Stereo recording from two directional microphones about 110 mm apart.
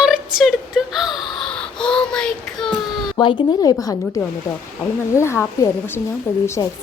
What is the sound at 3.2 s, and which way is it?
A woman's voice, 45° left (ahead or behind).